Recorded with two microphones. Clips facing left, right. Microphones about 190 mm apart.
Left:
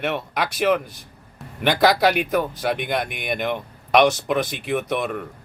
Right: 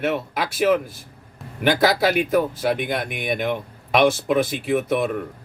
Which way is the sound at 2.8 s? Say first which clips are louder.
Even; 50° right (ahead or behind).